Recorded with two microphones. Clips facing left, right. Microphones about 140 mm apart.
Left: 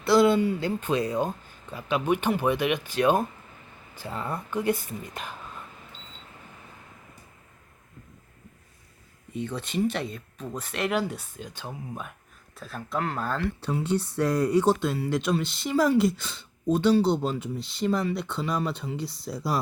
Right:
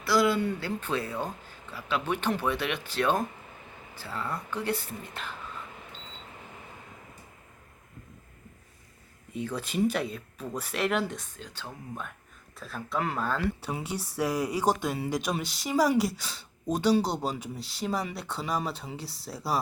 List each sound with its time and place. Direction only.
0.0 s speech: 25° left (ahead or behind)
9.3 s speech: 5° right (ahead or behind); by 12.1 s 10° left (ahead or behind)
12.5 s speech: centre (ahead or behind)